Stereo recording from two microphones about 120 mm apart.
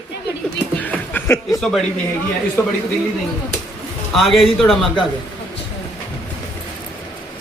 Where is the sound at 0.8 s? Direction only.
15° left (ahead or behind).